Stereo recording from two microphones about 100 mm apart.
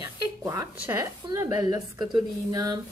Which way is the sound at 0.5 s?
30° right (ahead or behind).